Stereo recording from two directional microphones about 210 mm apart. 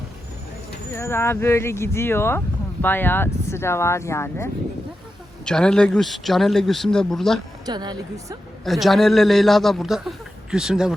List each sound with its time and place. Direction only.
0.9 s a man's voice: 10° left (ahead or behind)
7.6 s a woman's voice: 20° right (ahead or behind)
8.6 s a man's voice: centre (ahead or behind)